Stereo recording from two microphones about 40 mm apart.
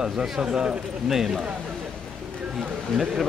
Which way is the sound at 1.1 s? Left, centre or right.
Centre.